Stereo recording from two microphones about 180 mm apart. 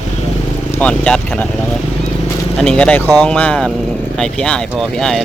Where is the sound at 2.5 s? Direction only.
5° left (ahead or behind).